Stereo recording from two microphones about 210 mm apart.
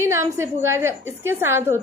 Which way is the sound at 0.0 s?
15° right (ahead or behind).